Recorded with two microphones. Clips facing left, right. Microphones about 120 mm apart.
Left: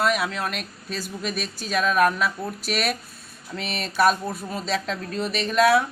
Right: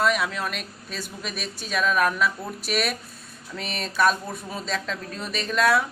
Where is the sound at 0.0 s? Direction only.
Centre (ahead or behind).